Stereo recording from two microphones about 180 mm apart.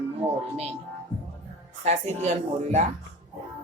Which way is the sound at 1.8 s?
40° right (ahead or behind).